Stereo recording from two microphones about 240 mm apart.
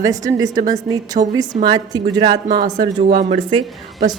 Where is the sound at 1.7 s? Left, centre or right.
Centre.